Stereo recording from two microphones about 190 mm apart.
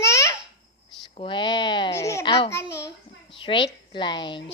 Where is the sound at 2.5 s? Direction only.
15° left (ahead or behind).